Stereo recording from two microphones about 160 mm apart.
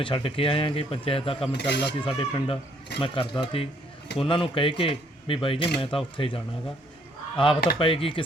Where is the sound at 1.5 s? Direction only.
90° left.